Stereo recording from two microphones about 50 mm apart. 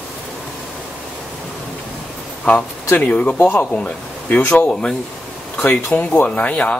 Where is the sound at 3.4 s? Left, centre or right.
Left.